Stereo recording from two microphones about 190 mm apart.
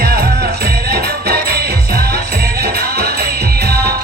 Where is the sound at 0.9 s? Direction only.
55° right (ahead or behind).